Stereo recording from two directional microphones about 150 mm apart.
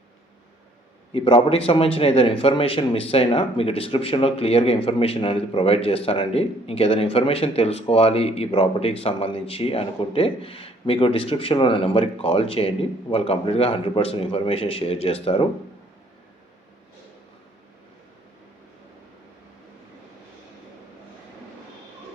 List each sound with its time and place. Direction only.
1.1 s a man's voice: 35° left (ahead or behind)